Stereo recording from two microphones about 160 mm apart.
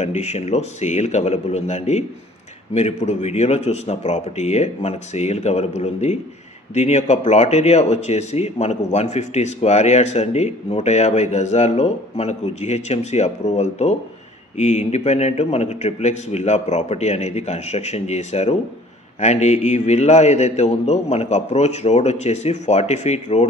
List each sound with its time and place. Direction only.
0.0 s speech: 45° left (ahead or behind)